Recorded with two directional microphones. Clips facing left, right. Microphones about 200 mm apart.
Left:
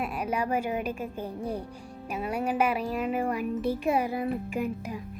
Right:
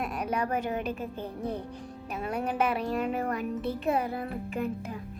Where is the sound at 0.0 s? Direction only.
5° left (ahead or behind).